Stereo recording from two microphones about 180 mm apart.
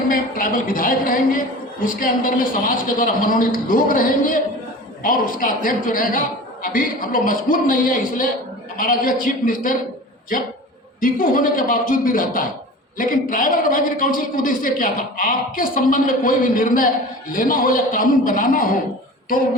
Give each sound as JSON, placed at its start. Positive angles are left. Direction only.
{"t": 0.1, "sound": "a woman's voice", "side_deg": 50}
{"t": 11.0, "sound": "a woman's voice", "side_deg": 50}